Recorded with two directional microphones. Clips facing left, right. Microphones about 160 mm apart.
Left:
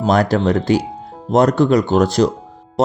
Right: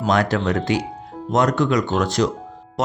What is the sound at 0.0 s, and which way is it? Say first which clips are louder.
Speech: left 4 dB; 35° left (ahead or behind).